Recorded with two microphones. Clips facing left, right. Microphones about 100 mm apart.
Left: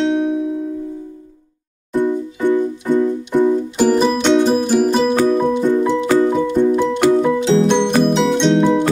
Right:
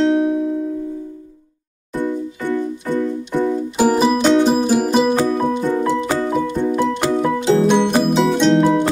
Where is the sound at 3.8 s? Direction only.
10° right (ahead or behind).